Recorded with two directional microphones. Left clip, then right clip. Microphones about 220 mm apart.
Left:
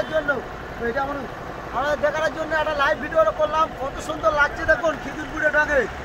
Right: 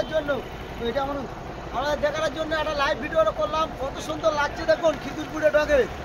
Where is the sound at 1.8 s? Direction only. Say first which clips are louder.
Left 3 dB; 5° left (ahead or behind).